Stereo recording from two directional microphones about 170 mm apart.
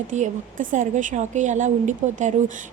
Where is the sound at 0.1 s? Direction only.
50° right (ahead or behind).